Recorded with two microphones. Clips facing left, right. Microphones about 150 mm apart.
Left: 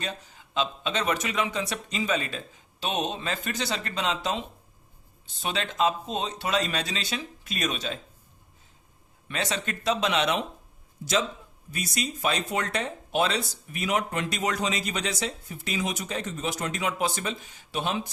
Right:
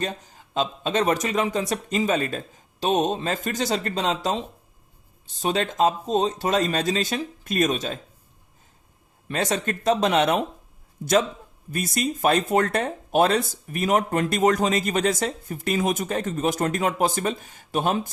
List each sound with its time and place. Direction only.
0.0 s speech: 45° right (ahead or behind)
9.3 s speech: 45° right (ahead or behind)